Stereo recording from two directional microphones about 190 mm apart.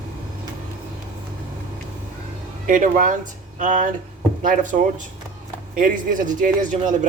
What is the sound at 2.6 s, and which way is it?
Speech, 45° right (ahead or behind).